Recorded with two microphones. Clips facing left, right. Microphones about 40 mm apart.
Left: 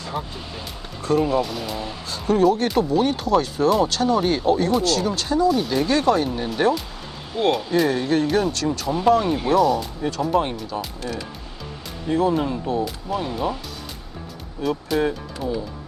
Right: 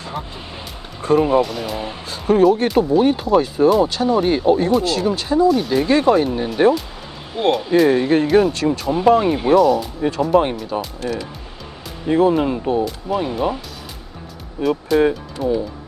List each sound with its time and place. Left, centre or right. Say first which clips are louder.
1.0 s speech: right 5 dB; right
1.4 s speech: right 5 dB; centre
1.8 s speech: right 2 dB; right
5.5 s speech: right 4 dB; centre
8.3 s speech: right 7 dB; centre
8.5 s speech: right 4 dB; right
9.6 s speech: right 4 dB; centre
12.0 s speech: right 5 dB; right
14.6 s speech: right 6 dB; centre